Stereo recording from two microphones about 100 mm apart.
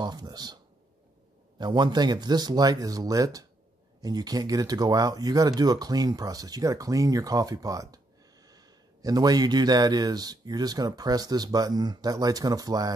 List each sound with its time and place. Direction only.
0.0 s speech: 40° right (ahead or behind)
1.6 s speech: 45° right (ahead or behind)